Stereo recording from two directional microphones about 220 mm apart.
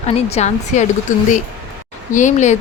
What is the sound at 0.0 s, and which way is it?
Speech, 30° left (ahead or behind).